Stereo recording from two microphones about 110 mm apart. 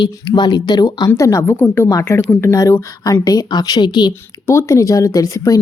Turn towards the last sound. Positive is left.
turn(degrees=30)  # may be behind; listen again after turning